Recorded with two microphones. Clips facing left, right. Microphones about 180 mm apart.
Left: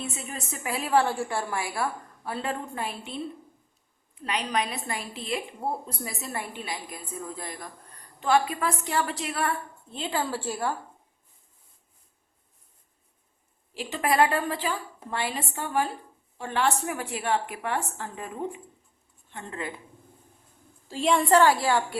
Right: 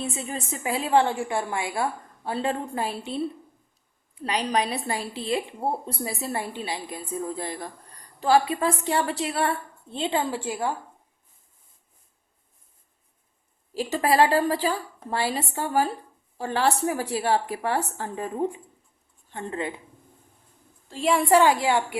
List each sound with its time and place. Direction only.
0.0 s a woman's voice: 30° right (ahead or behind)
13.7 s a woman's voice: 35° right (ahead or behind)
19.5 s a woman's voice: 25° right (ahead or behind)
20.8 s a woman's voice: centre (ahead or behind); by 21.9 s 15° right (ahead or behind)